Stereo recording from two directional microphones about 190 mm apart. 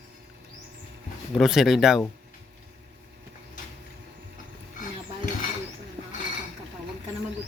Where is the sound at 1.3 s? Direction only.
Centre (ahead or behind).